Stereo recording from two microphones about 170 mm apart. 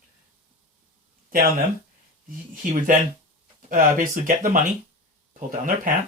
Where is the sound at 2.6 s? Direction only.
50° right (ahead or behind).